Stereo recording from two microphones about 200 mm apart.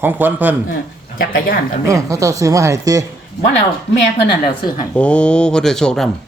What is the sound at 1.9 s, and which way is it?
Speech, 15° right (ahead or behind).